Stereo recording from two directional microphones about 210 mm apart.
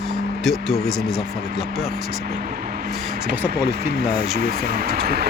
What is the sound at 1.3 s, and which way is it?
Speech, 45° right (ahead or behind).